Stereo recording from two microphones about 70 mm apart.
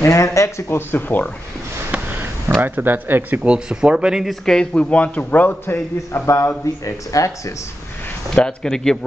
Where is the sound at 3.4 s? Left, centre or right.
Centre.